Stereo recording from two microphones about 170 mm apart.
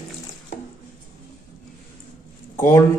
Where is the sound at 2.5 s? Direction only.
15° left (ahead or behind).